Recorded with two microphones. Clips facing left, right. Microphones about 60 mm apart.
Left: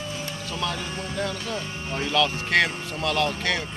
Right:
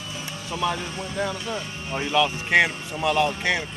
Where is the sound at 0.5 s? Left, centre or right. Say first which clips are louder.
Right 4 dB; centre.